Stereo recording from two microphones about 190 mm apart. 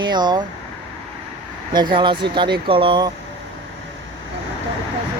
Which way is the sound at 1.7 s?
25° right (ahead or behind).